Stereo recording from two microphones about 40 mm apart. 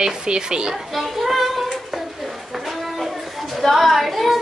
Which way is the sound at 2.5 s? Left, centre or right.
Centre.